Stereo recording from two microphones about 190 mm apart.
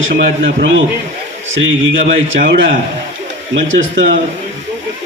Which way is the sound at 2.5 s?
75° right (ahead or behind).